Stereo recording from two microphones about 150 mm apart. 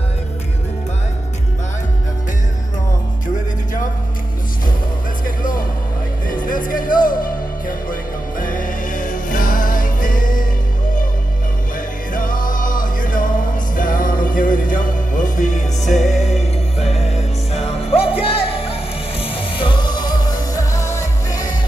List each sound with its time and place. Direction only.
6.2 s music: 65° left (ahead or behind)
12.1 s music: 65° left (ahead or behind); by 19.8 s 35° left (ahead or behind)
20.5 s music: 20° left (ahead or behind)